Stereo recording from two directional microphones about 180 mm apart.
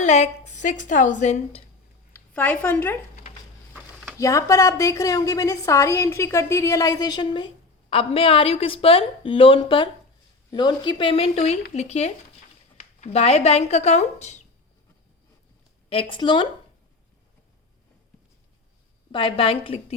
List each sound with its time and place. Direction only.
0.0 s a woman's voice: 40° left (ahead or behind)
2.1 s a woman's voice: 10° left (ahead or behind)
4.2 s a woman's voice: 15° left (ahead or behind); by 14.4 s 40° left (ahead or behind)
15.9 s a woman's voice: 30° left (ahead or behind)
19.1 s a woman's voice: 30° left (ahead or behind)